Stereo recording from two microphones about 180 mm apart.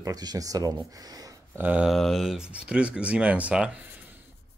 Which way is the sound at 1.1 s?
20° right (ahead or behind).